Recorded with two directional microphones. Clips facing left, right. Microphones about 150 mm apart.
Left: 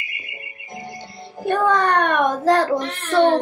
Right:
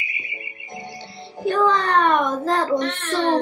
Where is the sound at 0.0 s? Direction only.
Centre (ahead or behind).